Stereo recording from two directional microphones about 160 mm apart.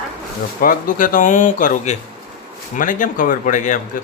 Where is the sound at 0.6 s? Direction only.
60° left (ahead or behind).